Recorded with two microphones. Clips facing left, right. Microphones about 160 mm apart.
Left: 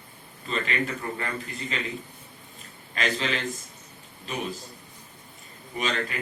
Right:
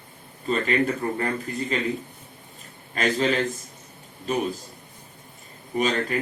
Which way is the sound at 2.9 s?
40° right (ahead or behind).